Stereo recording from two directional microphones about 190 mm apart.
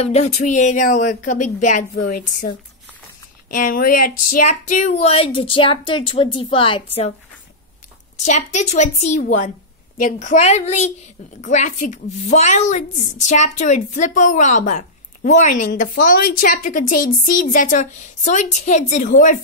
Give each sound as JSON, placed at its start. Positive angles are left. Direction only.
{"t": 0.0, "sound": "a woman's voice", "side_deg": 35}
{"t": 3.5, "sound": "a woman's voice", "side_deg": 45}
{"t": 8.2, "sound": "a woman's voice", "side_deg": 35}